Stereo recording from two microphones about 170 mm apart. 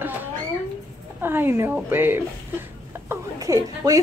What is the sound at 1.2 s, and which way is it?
A woman's voice, 15° right (ahead or behind).